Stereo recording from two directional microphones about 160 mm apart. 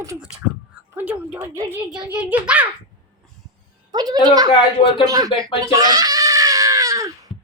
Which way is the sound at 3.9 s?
25° right (ahead or behind).